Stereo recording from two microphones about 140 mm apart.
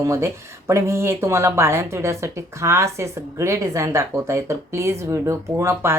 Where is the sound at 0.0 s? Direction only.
20° right (ahead or behind).